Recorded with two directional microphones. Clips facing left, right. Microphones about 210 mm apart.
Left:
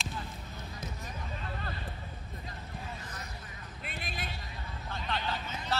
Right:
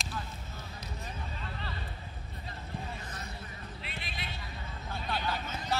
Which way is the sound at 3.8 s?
45° left (ahead or behind).